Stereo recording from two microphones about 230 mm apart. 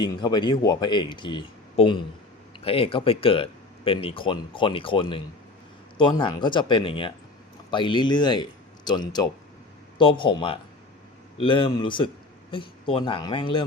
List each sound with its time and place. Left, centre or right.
0.0 s a man's voice: centre